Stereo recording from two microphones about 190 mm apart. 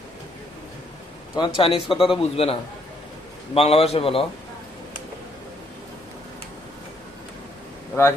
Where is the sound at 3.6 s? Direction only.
30° left (ahead or behind).